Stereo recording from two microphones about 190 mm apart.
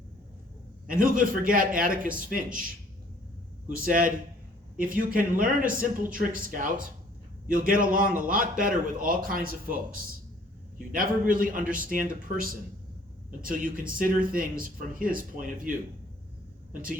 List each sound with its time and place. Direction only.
0.9 s a man's voice: 45° right (ahead or behind)
3.8 s a man's voice: 45° right (ahead or behind)